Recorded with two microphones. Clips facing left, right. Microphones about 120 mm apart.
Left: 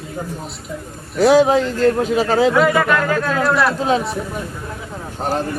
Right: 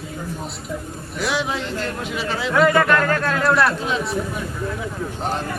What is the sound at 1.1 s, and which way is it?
A man's voice, 40° left (ahead or behind).